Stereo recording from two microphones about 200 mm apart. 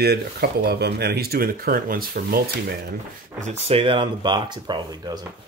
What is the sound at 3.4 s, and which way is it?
Speech, 30° right (ahead or behind).